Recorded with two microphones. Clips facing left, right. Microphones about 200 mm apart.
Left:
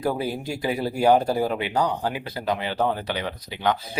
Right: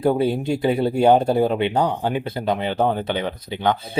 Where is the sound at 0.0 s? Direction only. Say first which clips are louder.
Right 7 dB; 25° right (ahead or behind).